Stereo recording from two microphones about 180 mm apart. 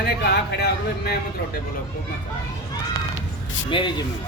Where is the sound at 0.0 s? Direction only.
60° left (ahead or behind).